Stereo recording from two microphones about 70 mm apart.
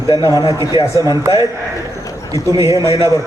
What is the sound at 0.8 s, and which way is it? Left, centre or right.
Speech, right.